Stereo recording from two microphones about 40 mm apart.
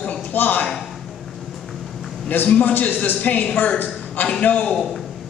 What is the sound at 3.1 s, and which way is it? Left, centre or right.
A man's voice, left.